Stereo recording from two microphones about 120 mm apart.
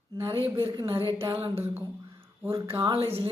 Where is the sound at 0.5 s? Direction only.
25° right (ahead or behind).